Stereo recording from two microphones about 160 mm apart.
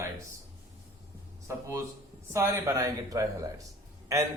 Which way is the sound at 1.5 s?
15° right (ahead or behind).